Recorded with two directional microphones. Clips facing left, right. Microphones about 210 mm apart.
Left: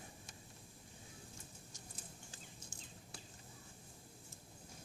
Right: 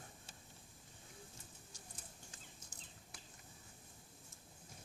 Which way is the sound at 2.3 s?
30° left (ahead or behind).